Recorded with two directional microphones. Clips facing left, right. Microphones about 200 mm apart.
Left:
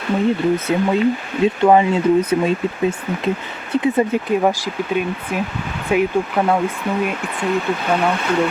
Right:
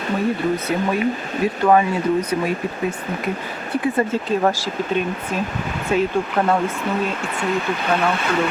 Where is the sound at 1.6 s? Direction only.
20° left (ahead or behind).